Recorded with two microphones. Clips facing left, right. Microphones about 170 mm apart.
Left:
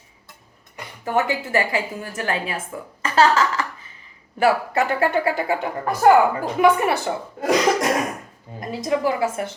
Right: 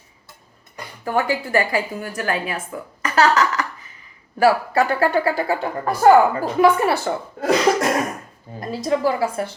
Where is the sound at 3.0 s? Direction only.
25° left (ahead or behind).